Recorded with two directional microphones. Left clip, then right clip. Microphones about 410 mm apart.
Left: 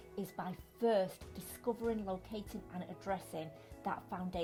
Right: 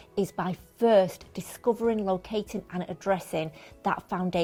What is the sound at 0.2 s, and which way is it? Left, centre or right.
Speech, right.